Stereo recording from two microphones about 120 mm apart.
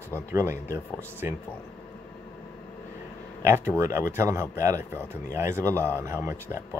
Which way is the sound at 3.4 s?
20° right (ahead or behind).